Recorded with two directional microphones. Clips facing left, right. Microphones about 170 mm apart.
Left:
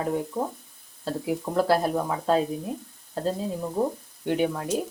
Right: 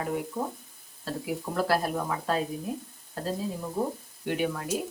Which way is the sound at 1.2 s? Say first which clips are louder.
Left 5 dB; 25° left (ahead or behind).